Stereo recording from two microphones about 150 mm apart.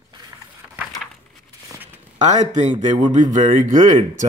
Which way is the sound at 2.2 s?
50° right (ahead or behind).